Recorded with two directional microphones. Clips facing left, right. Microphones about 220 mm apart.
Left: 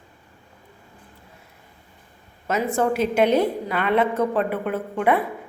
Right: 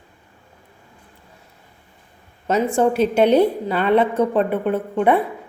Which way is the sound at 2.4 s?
30° right (ahead or behind).